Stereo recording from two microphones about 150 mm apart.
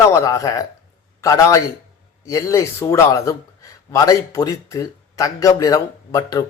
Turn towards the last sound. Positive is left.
turn(degrees=25)  # may be behind; listen again after turning